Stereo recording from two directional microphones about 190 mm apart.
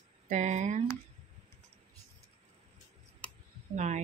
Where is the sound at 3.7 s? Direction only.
40° right (ahead or behind).